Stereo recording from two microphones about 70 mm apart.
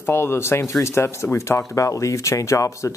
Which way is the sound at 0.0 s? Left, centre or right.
Left.